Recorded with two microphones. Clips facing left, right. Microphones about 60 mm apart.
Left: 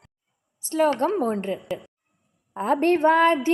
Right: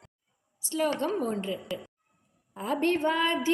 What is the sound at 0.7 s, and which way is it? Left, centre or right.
Speech, left.